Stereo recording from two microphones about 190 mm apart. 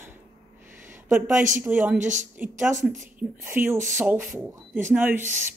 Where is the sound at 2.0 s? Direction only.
40° right (ahead or behind).